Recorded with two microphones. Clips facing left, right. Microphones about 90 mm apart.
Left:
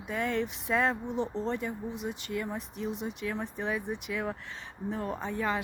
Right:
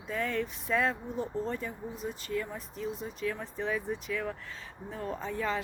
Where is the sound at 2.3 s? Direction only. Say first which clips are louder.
Even; 20° left (ahead or behind).